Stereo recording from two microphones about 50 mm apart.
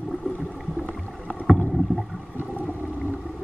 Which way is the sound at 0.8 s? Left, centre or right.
Right.